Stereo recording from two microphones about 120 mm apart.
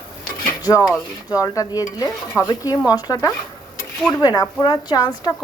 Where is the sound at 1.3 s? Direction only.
30° left (ahead or behind).